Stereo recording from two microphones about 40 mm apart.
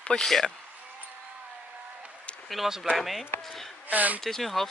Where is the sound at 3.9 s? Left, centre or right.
Right.